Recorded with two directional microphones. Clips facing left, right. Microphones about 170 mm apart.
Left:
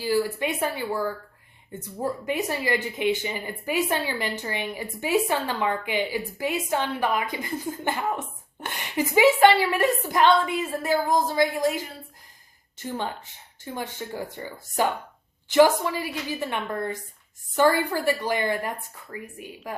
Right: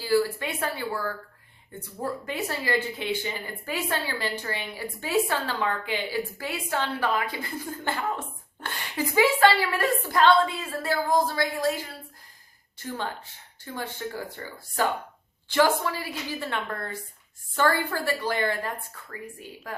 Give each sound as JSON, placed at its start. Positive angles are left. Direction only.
{"t": 0.0, "sound": "speech", "side_deg": 15}